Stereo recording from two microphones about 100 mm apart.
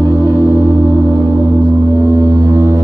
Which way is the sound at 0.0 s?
30° right (ahead or behind).